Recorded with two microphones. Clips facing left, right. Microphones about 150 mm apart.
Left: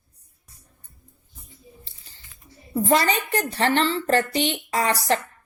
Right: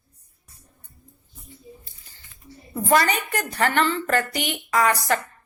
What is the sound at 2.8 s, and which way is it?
A woman's voice, 25° left (ahead or behind).